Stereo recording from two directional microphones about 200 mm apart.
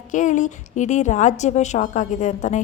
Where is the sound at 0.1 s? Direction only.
40° left (ahead or behind).